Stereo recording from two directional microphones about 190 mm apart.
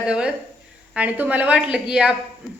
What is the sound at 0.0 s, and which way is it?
A woman's voice, 5° right (ahead or behind).